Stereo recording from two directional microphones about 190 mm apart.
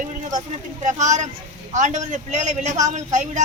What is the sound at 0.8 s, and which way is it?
Speech, 40° right (ahead or behind).